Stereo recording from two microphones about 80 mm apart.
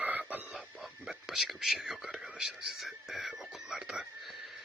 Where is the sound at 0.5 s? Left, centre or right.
Centre.